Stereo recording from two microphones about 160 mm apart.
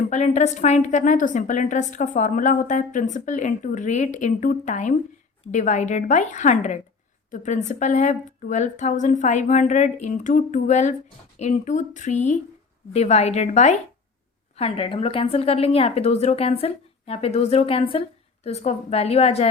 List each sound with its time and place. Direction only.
0.1 s a woman's voice: 45° left (ahead or behind)